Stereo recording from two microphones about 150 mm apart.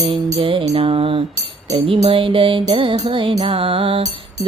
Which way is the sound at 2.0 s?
40° right (ahead or behind).